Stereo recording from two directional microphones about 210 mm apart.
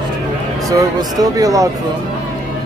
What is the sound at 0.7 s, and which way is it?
Speech, 15° right (ahead or behind).